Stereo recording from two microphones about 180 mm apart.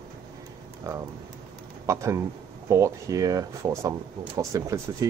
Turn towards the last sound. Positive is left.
turn(degrees=-20)  # may be behind; listen again after turning